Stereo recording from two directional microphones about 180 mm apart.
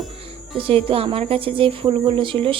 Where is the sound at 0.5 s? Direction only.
30° right (ahead or behind).